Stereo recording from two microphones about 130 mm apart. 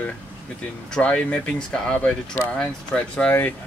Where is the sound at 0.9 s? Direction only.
10° left (ahead or behind).